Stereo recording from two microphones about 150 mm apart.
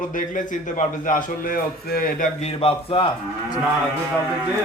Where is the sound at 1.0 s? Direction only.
70° left (ahead or behind).